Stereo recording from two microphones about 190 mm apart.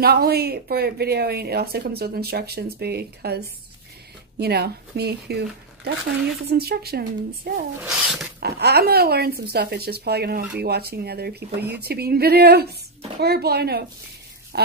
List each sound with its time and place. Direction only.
0.0 s speech: 55° right (ahead or behind)
6.5 s speech: 55° right (ahead or behind)
7.8 s speech: centre (ahead or behind)
8.4 s speech: 55° right (ahead or behind)
14.5 s a sound: 55° right (ahead or behind)